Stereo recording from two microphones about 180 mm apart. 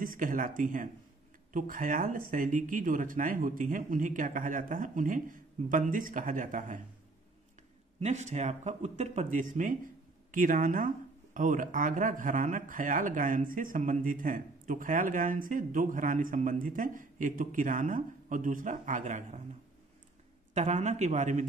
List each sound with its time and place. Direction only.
0.0 s speech: 50° right (ahead or behind)
8.0 s speech: 40° right (ahead or behind)
20.5 s speech: 40° right (ahead or behind)